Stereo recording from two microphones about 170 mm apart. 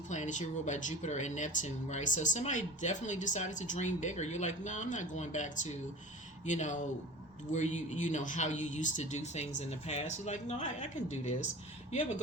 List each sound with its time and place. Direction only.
0.1 s speech: 45° left (ahead or behind)